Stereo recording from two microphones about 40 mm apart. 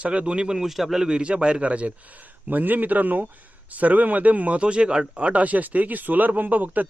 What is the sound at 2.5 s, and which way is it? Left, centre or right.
Speech, right.